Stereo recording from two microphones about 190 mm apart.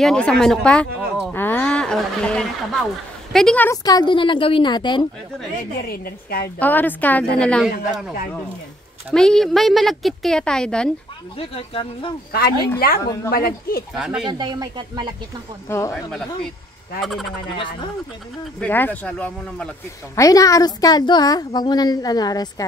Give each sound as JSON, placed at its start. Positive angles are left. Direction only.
{"t": 0.0, "sound": "a woman's voice", "side_deg": 5}
{"t": 5.9, "sound": "a woman's voice", "side_deg": 50}
{"t": 6.6, "sound": "a woman's voice", "side_deg": 10}
{"t": 9.1, "sound": "a woman's voice", "side_deg": 5}
{"t": 11.3, "sound": "speech", "side_deg": 30}
{"t": 12.3, "sound": "a woman's voice", "side_deg": 50}
{"t": 13.0, "sound": "speech", "side_deg": 20}
{"t": 13.3, "sound": "a woman's voice", "side_deg": 50}
{"t": 13.9, "sound": "a woman's voice", "side_deg": 0}
{"t": 14.4, "sound": "speech", "side_deg": -20}
{"t": 15.7, "sound": "speech", "side_deg": 15}
{"t": 17.0, "sound": "a woman's voice", "side_deg": 0}
{"t": 18.6, "sound": "speech", "side_deg": 10}
{"t": 20.2, "sound": "speech", "side_deg": 15}